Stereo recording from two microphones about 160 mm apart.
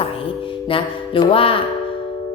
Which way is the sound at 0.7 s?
35° left (ahead or behind).